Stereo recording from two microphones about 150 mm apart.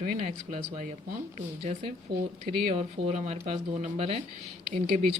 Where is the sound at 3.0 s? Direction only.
90° right.